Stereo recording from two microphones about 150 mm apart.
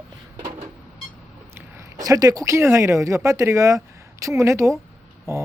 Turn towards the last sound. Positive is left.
turn(degrees=-20)  # may be behind; listen again after turning